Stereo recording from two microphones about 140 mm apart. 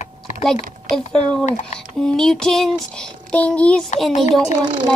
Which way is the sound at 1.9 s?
5° left (ahead or behind).